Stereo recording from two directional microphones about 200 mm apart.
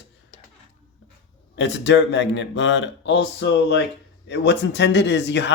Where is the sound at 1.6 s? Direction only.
60° left (ahead or behind).